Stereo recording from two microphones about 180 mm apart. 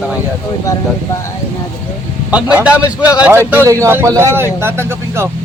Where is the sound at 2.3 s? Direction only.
5° right (ahead or behind).